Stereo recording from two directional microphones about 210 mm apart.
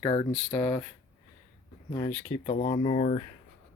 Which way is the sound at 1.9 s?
25° left (ahead or behind).